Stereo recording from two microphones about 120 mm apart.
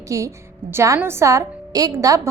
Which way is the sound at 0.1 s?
25° right (ahead or behind).